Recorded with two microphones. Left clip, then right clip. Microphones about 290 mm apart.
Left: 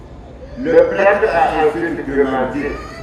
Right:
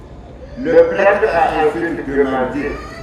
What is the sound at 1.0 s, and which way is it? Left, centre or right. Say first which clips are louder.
A man's voice: even; right.